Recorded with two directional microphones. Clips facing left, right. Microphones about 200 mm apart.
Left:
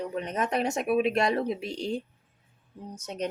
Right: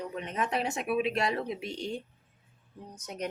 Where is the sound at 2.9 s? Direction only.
30° left (ahead or behind).